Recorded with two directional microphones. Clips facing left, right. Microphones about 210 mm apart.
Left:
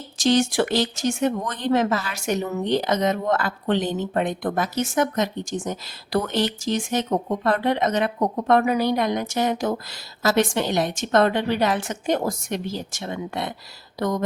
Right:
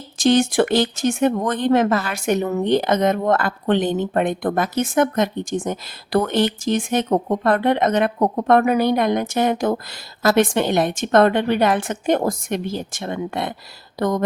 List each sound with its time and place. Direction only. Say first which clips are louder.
0.2 s speech: right 4 dB; 55° right (ahead or behind)